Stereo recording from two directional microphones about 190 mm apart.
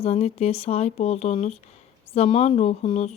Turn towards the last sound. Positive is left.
turn(degrees=35)  # may be behind; listen again after turning